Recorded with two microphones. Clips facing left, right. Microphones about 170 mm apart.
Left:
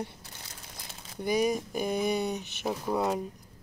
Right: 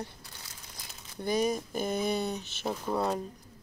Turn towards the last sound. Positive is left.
turn(degrees=5)  # may be behind; listen again after turning